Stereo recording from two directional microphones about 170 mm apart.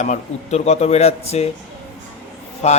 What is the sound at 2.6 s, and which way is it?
Speech, 40° left (ahead or behind).